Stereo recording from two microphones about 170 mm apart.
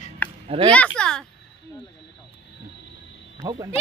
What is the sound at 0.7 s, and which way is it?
Speech, 5° left (ahead or behind).